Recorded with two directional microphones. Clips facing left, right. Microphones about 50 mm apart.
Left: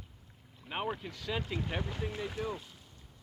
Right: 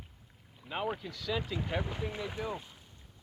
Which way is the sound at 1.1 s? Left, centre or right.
Left.